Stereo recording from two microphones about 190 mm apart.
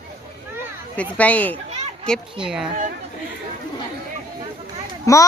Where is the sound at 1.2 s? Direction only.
10° left (ahead or behind).